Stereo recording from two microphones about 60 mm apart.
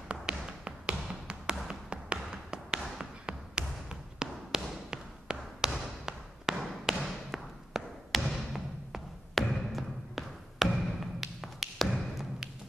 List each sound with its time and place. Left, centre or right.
0.1 s music: centre
3.0 s basketball bounce: centre